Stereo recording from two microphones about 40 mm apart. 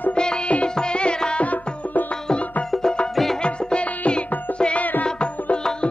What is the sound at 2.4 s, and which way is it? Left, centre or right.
Music, left.